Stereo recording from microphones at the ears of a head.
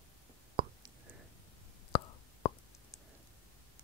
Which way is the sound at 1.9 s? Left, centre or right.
Left.